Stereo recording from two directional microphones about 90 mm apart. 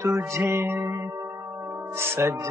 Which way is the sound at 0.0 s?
30° right (ahead or behind).